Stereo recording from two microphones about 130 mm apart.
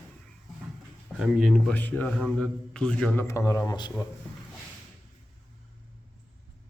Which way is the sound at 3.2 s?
25° left (ahead or behind).